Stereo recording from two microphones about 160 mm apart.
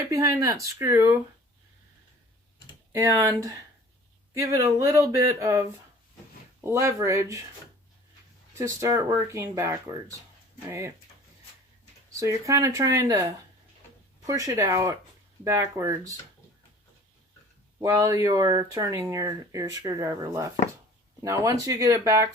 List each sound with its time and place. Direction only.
0.1 s speech: 20° right (ahead or behind)
2.9 s speech: 20° right (ahead or behind)
8.5 s speech: 20° right (ahead or behind)
12.2 s speech: 20° right (ahead or behind)
14.3 s speech: 20° right (ahead or behind)
17.7 s speech: 20° right (ahead or behind)